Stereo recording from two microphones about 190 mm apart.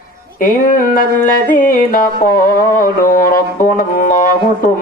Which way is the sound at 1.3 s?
45° left (ahead or behind).